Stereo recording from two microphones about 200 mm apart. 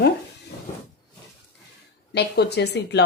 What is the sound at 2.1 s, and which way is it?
Speech, 55° left (ahead or behind).